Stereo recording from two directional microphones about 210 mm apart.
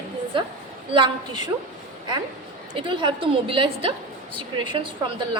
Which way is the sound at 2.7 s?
25° right (ahead or behind).